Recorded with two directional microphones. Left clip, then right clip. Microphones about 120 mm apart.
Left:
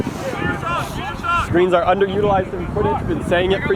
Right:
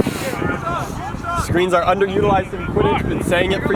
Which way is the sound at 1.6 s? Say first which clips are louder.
Right 1 dB; 30° right (ahead or behind).